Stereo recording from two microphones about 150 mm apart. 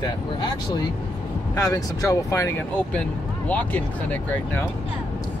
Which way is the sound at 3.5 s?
10° left (ahead or behind).